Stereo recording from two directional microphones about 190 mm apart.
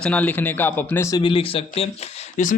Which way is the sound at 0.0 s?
10° left (ahead or behind).